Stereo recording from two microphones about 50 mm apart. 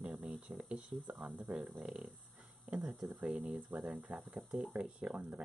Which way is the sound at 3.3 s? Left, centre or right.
Right.